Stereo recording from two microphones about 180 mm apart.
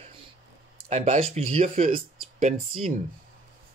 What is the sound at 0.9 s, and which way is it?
Speech, 35° right (ahead or behind).